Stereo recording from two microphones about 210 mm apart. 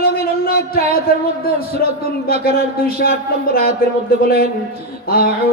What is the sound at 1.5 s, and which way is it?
Music, 45° left (ahead or behind).